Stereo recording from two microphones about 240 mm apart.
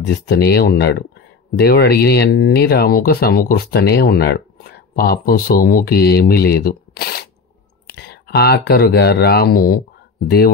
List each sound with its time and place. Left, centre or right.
0.0 s speech: left